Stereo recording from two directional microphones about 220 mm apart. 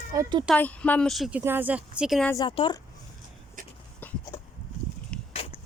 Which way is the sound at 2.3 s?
20° left (ahead or behind).